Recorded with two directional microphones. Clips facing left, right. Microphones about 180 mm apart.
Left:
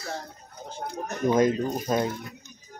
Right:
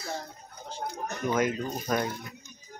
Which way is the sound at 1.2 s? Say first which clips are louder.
Left 6 dB; 35° left (ahead or behind).